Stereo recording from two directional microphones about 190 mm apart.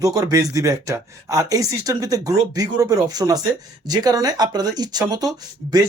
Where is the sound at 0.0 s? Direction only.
20° right (ahead or behind).